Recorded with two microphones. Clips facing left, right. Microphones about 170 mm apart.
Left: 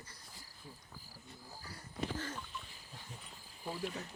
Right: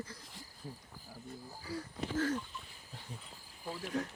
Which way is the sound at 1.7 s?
90° right.